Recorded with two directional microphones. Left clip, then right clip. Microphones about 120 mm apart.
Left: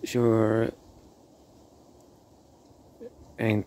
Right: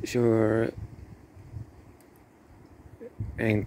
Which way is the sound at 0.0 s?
15° left (ahead or behind).